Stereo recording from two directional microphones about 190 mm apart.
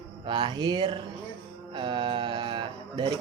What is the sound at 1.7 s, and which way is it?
Mantra, 25° right (ahead or behind).